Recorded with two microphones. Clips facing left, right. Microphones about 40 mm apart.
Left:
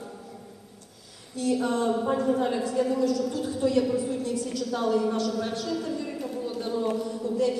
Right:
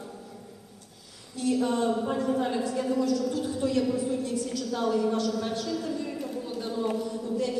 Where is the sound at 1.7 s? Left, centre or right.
Centre.